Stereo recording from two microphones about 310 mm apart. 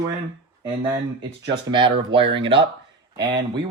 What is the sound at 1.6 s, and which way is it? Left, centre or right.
Speech, centre.